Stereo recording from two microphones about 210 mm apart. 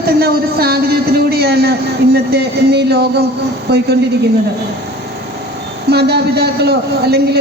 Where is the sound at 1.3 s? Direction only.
50° right (ahead or behind).